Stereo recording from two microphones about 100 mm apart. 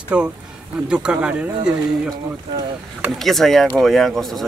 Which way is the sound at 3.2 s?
Centre (ahead or behind).